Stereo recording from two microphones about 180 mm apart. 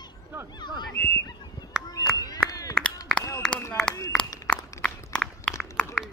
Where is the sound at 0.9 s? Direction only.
15° left (ahead or behind).